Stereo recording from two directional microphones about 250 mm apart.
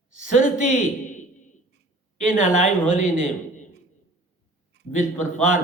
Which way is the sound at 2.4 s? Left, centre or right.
Left.